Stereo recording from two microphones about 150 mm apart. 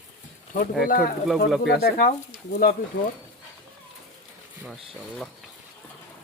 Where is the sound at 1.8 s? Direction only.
90° left.